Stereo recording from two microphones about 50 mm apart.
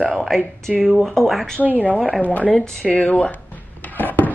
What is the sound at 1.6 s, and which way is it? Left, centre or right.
Speech, right.